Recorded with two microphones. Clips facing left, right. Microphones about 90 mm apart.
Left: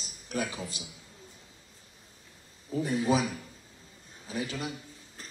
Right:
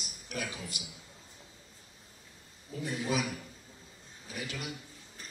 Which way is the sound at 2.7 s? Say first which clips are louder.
Left 6 dB; 30° left (ahead or behind).